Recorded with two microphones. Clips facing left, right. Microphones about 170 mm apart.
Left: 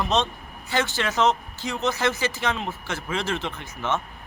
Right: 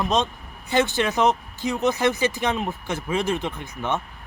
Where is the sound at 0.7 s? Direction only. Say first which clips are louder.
Right 4 dB; 20° right (ahead or behind).